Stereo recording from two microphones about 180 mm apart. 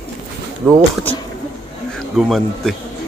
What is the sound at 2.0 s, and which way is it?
Speech, centre (ahead or behind).